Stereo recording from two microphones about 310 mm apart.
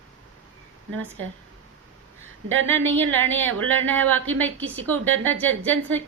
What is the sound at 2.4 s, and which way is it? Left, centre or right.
Speech, right.